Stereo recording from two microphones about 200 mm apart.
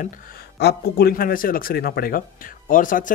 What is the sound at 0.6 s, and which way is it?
Speech, 50° left (ahead or behind).